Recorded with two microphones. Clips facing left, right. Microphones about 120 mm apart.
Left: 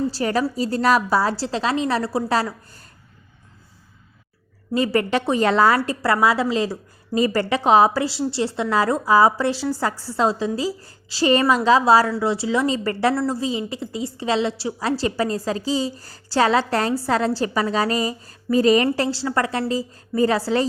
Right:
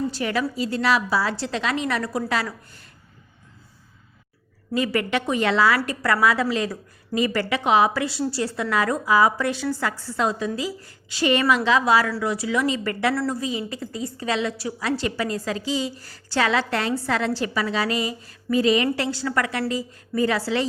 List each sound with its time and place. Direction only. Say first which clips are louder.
0.1 s a woman's voice: left 3 dB; 35° left (ahead or behind)
4.7 s a woman's voice: left 3 dB; 35° left (ahead or behind)
5.8 s a woman's voice: left 2 dB; 30° left (ahead or behind)